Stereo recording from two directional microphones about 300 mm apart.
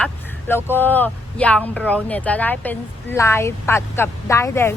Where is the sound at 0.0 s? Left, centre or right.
Centre.